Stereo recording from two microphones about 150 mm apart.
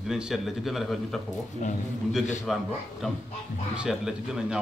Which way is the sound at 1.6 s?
55° left (ahead or behind).